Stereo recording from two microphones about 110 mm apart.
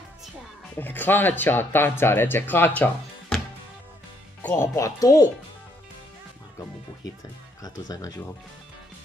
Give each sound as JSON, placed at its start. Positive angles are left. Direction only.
{"t": 0.7, "sound": "speech", "side_deg": 15}
{"t": 4.4, "sound": "speech", "side_deg": 20}
{"t": 7.6, "sound": "speech", "side_deg": 35}